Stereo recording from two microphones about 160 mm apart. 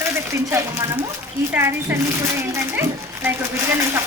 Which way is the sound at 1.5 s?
15° right (ahead or behind).